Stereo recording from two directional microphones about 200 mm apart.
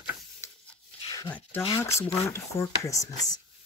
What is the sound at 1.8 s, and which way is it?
Speech, 15° left (ahead or behind).